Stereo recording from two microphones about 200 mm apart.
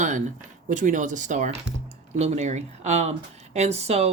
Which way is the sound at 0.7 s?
40° right (ahead or behind).